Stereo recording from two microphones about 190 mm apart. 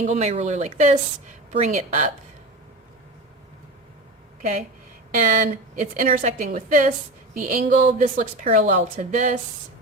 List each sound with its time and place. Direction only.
0.0 s speech: 35° right (ahead or behind)
5.1 s a woman's voice: 45° right (ahead or behind)